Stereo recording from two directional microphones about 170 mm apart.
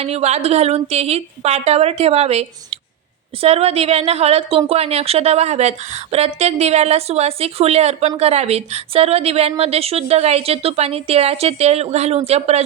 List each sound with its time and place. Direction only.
0.0 s a woman's voice: 40° right (ahead or behind)